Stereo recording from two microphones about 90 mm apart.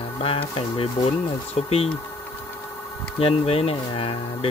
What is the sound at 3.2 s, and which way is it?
Speech, 90° left.